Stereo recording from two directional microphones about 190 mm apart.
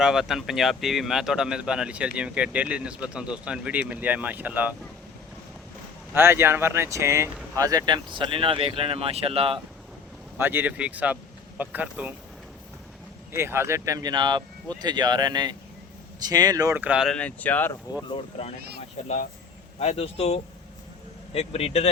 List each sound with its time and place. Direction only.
0.0 s speech: centre (ahead or behind)
6.1 s speech: 10° right (ahead or behind); by 9.6 s 30° right (ahead or behind)
10.3 s speech: 10° right (ahead or behind)
13.3 s speech: 15° right (ahead or behind); by 17.7 s 10° left (ahead or behind)
18.1 s speech: 30° left (ahead or behind)